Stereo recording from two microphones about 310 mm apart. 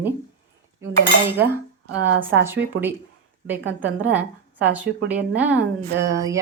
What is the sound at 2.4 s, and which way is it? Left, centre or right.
Speech, centre.